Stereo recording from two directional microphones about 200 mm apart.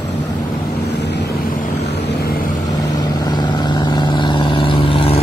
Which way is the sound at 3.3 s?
20° left (ahead or behind).